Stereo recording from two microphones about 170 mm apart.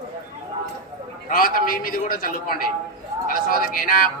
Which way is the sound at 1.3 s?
60° left (ahead or behind).